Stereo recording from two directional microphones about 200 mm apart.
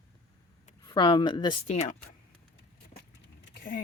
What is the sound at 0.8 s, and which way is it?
Speech, 20° left (ahead or behind).